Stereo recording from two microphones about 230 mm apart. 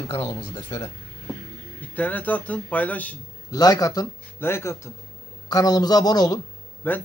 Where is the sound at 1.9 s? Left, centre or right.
Centre.